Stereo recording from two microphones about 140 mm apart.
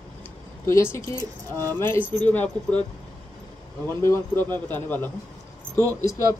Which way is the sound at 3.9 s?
20° left (ahead or behind).